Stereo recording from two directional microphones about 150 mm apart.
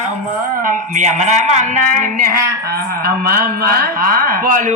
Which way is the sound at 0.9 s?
55° right (ahead or behind).